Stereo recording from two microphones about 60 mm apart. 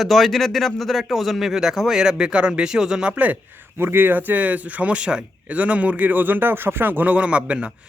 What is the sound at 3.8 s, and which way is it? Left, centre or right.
Speech, right.